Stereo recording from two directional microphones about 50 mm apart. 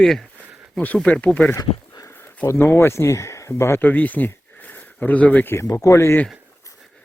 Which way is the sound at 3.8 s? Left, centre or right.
Left.